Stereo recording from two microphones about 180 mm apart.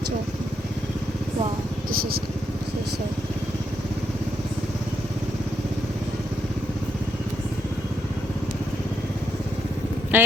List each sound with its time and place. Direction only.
1.9 s speech: 55° right (ahead or behind)
10.1 s speech: 10° right (ahead or behind)